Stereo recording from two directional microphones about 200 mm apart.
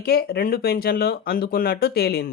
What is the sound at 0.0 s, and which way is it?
Speech, 55° left (ahead or behind).